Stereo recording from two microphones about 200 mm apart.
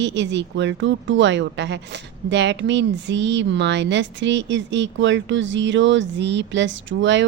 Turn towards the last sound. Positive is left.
turn(degrees=-65)  # may be behind; listen again after turning